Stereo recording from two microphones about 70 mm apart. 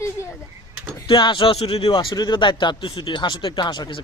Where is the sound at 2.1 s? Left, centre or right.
Left.